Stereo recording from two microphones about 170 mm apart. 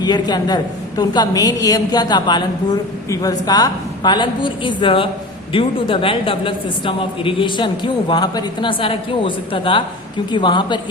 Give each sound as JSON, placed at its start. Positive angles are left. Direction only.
{"t": 0.0, "sound": "a woman's voice", "side_deg": 25}